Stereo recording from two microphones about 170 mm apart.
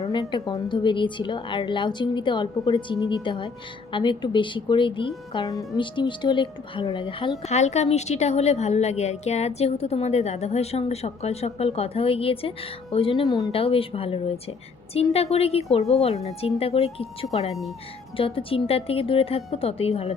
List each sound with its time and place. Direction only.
0.0 s a woman's voice: 30° left (ahead or behind)